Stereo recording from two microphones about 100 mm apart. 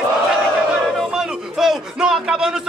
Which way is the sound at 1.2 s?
5° right (ahead or behind).